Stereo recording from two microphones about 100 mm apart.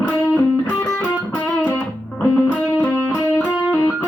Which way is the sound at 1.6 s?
15° left (ahead or behind).